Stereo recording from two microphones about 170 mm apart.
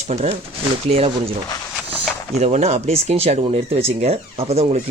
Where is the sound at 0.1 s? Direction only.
40° right (ahead or behind).